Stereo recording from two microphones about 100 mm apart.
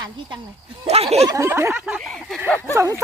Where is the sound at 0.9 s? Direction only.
90° right.